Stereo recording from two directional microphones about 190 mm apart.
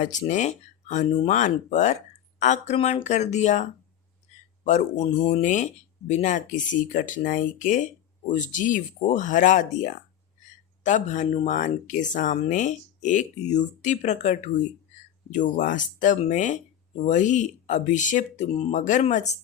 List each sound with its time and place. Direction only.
0.0 s speech: 40° left (ahead or behind)